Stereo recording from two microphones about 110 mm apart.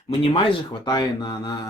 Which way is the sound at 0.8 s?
40° left (ahead or behind).